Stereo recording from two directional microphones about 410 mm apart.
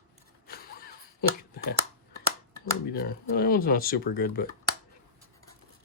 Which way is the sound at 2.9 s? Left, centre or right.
Left.